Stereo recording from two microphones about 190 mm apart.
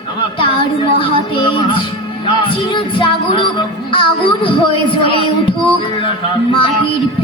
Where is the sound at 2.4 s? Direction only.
25° left (ahead or behind).